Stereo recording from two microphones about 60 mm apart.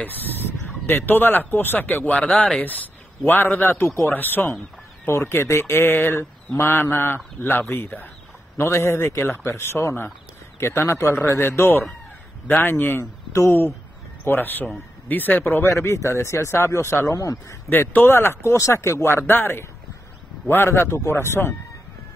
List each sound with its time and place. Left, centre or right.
0.0 s speech: left
5.0 s speech: left
8.5 s speech: left
13.3 s speech: left
14.2 s speech: left
15.7 s speech: left
17.6 s speech: left
20.8 s speech: left